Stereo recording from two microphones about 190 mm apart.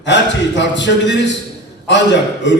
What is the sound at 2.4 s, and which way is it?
Speech, 70° left (ahead or behind).